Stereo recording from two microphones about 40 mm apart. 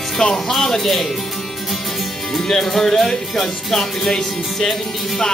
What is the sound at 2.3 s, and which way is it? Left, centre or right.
Speech, centre.